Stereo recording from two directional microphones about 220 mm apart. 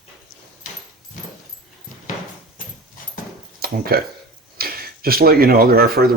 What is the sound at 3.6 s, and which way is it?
Speech, 45° right (ahead or behind).